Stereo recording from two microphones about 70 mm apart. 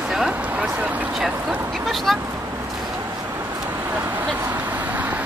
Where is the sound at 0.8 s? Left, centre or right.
Right.